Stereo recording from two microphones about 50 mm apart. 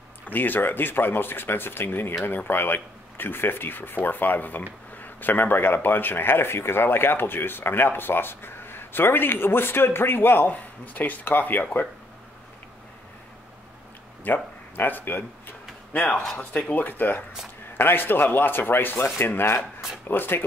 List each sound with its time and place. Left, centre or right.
0.3 s a man's voice: left
10.5 s speech: left
14.2 s speech: left
15.9 s a man's voice: left